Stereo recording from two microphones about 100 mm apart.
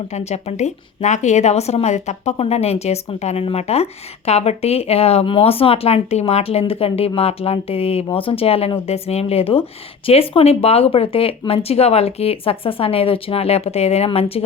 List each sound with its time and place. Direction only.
0.1 s speech: 90° left
8.1 s speech: 65° left (ahead or behind)
10.1 s speech: 85° left